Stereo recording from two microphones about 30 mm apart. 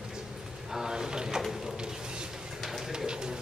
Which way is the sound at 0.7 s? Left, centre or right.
Centre.